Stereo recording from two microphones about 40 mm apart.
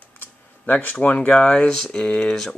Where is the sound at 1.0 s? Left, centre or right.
Left.